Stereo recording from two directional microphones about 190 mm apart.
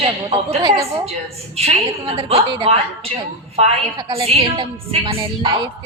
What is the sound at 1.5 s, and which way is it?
A woman's voice, 30° right (ahead or behind).